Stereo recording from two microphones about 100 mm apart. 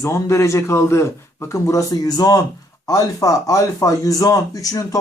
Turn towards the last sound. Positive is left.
turn(degrees=35)  # may be behind; listen again after turning